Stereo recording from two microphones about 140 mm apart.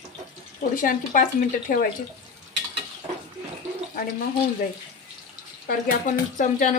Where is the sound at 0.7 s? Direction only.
75° left (ahead or behind).